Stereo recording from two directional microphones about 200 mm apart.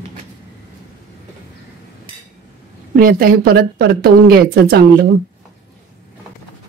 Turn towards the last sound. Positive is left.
turn(degrees=-50)  # may be behind; listen again after turning